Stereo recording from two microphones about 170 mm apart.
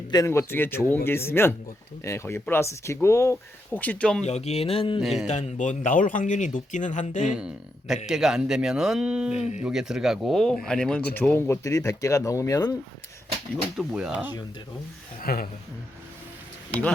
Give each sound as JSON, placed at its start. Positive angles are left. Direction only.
{"t": 0.1, "sound": "speech", "side_deg": 20}
{"t": 4.3, "sound": "a sound", "side_deg": 40}
{"t": 4.9, "sound": "speech", "side_deg": 0}
{"t": 5.2, "sound": "speech", "side_deg": 40}
{"t": 7.3, "sound": "speech", "side_deg": -5}
{"t": 9.4, "sound": "speech", "side_deg": 40}
{"t": 9.6, "sound": "speech", "side_deg": -5}
{"t": 13.7, "sound": "speech", "side_deg": -5}
{"t": 15.2, "sound": "speech", "side_deg": 60}